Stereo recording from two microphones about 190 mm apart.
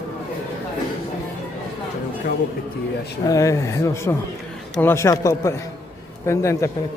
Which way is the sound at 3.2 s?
15° left (ahead or behind).